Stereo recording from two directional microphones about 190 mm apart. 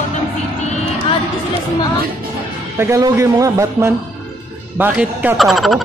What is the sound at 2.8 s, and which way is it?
A man's voice, 15° right (ahead or behind).